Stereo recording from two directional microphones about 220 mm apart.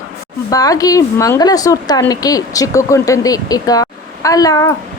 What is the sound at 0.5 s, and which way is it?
A woman's voice, 15° left (ahead or behind).